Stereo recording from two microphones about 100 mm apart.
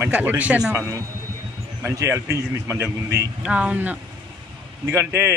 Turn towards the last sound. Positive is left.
turn(degrees=-30)  # may be behind; listen again after turning